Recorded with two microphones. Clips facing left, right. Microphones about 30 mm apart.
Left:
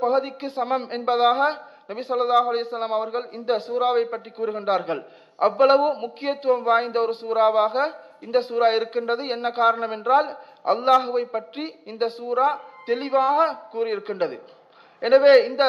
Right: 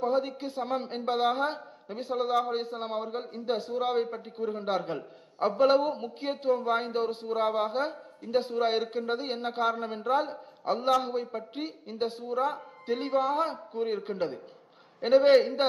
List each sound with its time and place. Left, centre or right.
0.0 s speech: left